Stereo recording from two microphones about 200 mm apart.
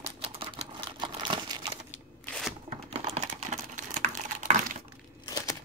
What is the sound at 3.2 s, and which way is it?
Typing, 40° right (ahead or behind).